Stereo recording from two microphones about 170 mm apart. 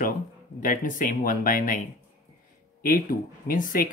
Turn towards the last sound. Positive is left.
turn(degrees=50)  # may be behind; listen again after turning